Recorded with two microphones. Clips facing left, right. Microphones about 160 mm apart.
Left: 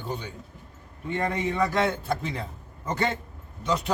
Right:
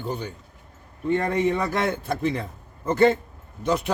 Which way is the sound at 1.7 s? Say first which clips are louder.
Even; 55° right (ahead or behind).